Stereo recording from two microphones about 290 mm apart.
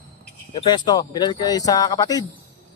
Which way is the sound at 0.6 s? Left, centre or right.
Centre.